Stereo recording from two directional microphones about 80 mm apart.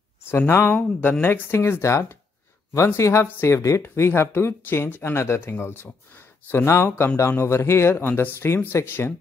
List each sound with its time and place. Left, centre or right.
0.3 s speech: left